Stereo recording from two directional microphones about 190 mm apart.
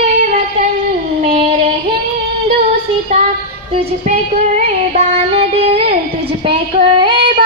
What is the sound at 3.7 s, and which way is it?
Child singing, 35° right (ahead or behind).